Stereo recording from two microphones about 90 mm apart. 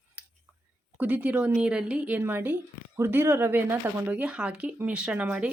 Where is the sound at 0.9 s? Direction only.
20° right (ahead or behind).